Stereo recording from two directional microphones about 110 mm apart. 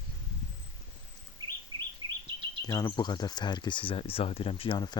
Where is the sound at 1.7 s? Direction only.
40° right (ahead or behind).